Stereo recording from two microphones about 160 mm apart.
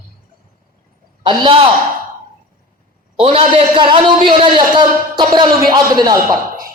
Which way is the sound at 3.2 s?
35° right (ahead or behind).